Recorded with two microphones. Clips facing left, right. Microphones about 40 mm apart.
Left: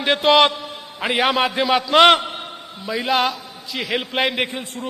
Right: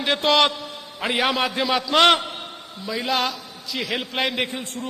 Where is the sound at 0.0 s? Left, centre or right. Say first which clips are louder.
Left 4 dB; centre.